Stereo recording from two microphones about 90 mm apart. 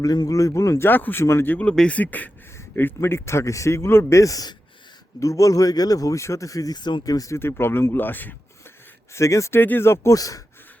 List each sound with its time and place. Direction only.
0.0 s a man's voice: 45° left (ahead or behind)
0.9 s a man's voice: 20° left (ahead or behind); by 6.7 s 40° left (ahead or behind)
6.7 s speech: 55° left (ahead or behind)
7.3 s speech: 25° left (ahead or behind)
9.1 s a man's voice: 35° left (ahead or behind)
9.6 s speech: 25° left (ahead or behind)
10.2 s a man's voice: 40° left (ahead or behind)